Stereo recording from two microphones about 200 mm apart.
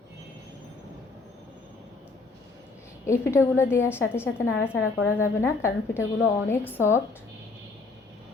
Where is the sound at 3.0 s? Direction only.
15° left (ahead or behind).